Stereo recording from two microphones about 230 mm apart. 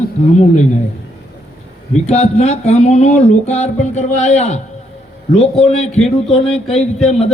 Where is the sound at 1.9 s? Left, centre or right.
Left.